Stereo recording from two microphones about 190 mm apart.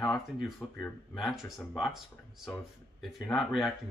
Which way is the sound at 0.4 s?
Centre (ahead or behind).